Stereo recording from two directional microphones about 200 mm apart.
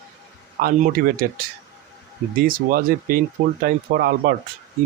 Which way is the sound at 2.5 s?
45° right (ahead or behind).